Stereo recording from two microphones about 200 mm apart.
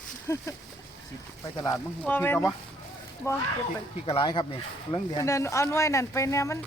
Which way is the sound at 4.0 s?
25° left (ahead or behind).